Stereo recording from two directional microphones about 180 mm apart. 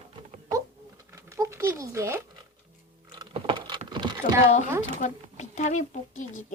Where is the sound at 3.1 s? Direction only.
25° right (ahead or behind).